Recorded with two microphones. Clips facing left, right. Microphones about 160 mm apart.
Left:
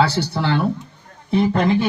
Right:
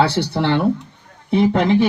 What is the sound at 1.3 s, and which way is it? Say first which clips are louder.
Speech: right 2 dB; 70° right (ahead or behind).